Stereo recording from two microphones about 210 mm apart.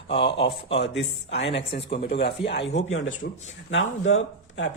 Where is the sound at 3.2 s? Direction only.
50° left (ahead or behind).